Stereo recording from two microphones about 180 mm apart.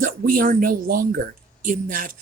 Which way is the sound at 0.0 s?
50° right (ahead or behind).